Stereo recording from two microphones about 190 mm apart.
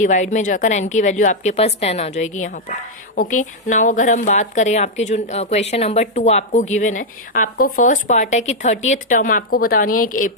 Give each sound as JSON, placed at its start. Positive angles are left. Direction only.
{"t": 0.0, "sound": "a woman's voice", "side_deg": 40}